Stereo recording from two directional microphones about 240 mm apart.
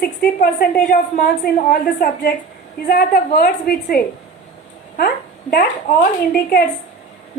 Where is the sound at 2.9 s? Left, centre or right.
Left.